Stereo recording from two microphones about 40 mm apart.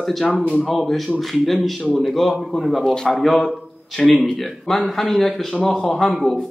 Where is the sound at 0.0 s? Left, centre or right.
Centre.